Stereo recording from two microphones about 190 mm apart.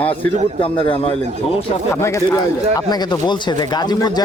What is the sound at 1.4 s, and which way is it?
Speech, 30° left (ahead or behind).